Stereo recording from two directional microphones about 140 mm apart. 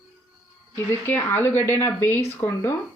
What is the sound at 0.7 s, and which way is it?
Speech, 15° left (ahead or behind).